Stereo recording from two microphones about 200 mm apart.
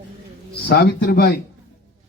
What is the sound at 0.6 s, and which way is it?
Speech, 55° left (ahead or behind).